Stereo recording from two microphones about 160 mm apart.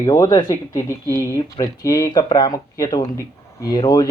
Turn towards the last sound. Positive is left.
turn(degrees=25)  # may be behind; listen again after turning